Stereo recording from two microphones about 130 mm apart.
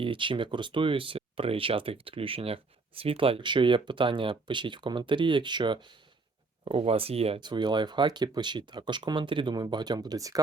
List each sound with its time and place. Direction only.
0.0 s speech: 40° right (ahead or behind)
7.3 s speech: 35° right (ahead or behind)